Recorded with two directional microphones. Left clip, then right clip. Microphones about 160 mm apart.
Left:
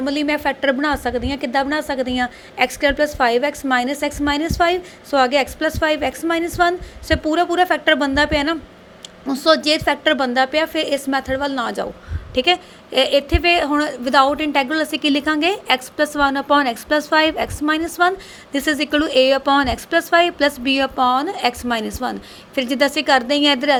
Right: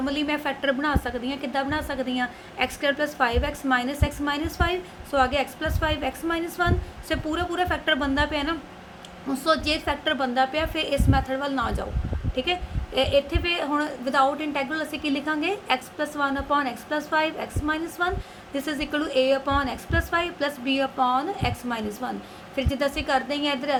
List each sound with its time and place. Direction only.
0.0 s a woman's voice: 45° left (ahead or behind)